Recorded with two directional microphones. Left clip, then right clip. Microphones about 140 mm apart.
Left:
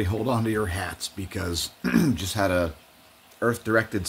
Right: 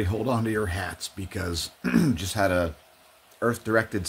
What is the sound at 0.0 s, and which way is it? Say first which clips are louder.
Speech: left 1 dB; centre (ahead or behind).